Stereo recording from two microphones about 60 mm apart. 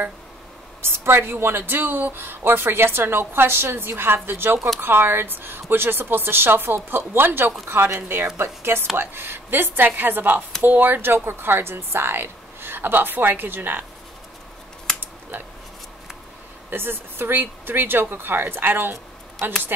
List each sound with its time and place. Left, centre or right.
0.9 s a woman's voice: right
16.7 s speech: right